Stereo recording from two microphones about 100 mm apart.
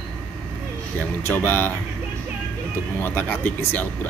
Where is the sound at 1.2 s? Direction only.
25° left (ahead or behind).